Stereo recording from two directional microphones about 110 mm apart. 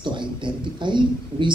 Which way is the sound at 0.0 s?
45° right (ahead or behind).